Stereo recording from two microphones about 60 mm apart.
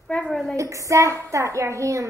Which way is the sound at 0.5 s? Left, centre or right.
Right.